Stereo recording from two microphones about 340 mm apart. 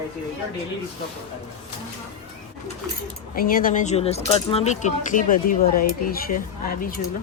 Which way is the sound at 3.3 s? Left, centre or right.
Left.